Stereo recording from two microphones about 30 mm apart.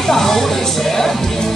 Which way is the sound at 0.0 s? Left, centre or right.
Centre.